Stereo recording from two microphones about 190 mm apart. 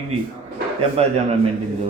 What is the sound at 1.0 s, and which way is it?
Speech, 30° right (ahead or behind).